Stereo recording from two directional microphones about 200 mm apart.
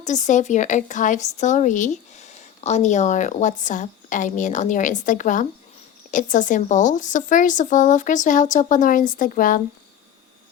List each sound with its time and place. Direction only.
0.0 s speech: 35° left (ahead or behind)